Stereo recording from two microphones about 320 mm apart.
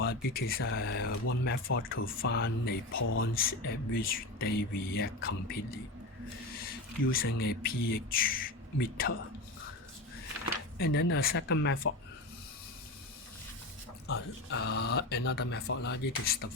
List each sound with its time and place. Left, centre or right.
0.0 s speech: left
6.6 s speech: left
10.8 s speech: left
14.1 s speech: left